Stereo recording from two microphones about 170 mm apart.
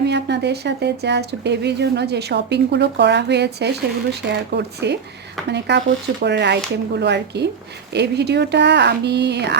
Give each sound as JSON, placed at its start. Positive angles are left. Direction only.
{"t": 0.0, "sound": "speech", "side_deg": -80}